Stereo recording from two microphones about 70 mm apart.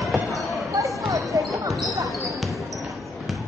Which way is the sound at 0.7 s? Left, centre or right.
Right.